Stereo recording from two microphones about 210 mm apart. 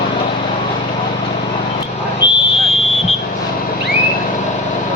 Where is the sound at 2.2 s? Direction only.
25° left (ahead or behind).